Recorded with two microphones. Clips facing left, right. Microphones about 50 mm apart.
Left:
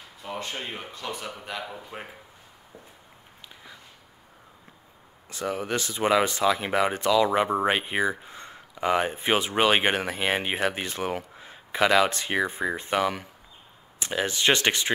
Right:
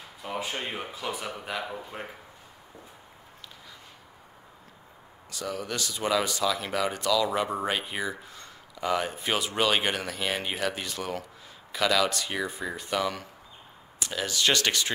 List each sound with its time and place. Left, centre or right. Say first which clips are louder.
0.2 s speech: right 1 dB; centre
5.3 s speech: left 5 dB; left